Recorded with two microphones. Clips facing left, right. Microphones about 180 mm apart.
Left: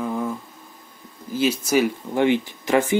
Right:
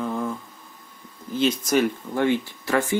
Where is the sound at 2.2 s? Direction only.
20° left (ahead or behind).